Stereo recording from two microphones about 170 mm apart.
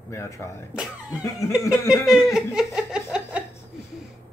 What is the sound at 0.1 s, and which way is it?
Speech, 15° left (ahead or behind).